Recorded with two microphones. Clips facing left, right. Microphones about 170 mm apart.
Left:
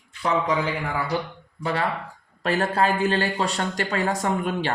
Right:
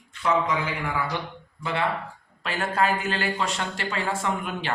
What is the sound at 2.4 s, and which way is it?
Speech, 40° left (ahead or behind).